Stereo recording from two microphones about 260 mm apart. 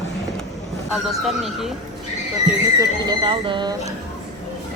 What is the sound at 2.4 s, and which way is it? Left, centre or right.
Speech, centre.